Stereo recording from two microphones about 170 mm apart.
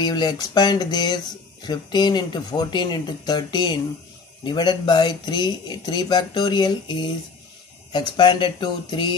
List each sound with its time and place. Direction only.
0.0 s speech: 25° left (ahead or behind)